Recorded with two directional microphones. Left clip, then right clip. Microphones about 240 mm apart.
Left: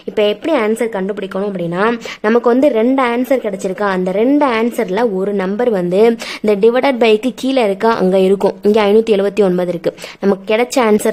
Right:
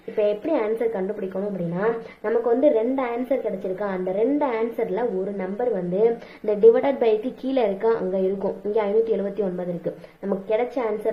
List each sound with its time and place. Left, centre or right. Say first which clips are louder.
0.2 s a woman's voice: left 8 dB; left